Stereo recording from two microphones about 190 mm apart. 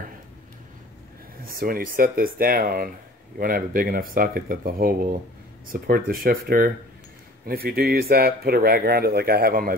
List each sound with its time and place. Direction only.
1.4 s speech: 50° right (ahead or behind)